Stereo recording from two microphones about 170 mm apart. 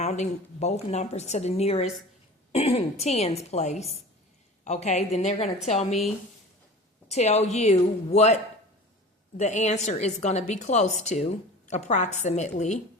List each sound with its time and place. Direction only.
0.0 s a woman's voice: 40° left (ahead or behind)
7.1 s a woman's voice: 40° left (ahead or behind)
9.4 s a woman's voice: 45° left (ahead or behind)